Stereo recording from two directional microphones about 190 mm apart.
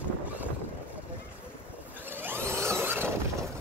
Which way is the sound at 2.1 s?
10° right (ahead or behind).